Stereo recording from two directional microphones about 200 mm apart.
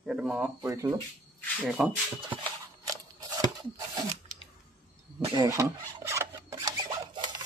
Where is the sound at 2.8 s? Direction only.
15° right (ahead or behind).